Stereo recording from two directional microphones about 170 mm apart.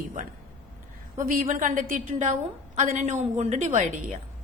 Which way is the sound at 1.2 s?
50° right (ahead or behind).